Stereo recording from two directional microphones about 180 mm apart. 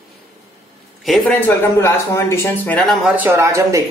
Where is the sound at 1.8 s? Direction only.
15° left (ahead or behind).